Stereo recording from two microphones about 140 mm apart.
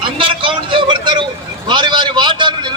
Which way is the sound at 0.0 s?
40° right (ahead or behind).